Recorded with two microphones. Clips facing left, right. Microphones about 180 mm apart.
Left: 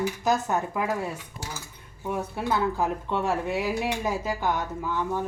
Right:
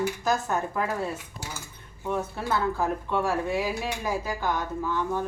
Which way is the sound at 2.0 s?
15° left (ahead or behind).